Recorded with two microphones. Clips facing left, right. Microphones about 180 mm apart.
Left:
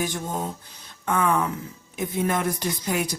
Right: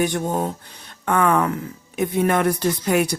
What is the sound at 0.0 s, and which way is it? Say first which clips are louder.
A woman's voice: right 7 dB; 65° right (ahead or behind).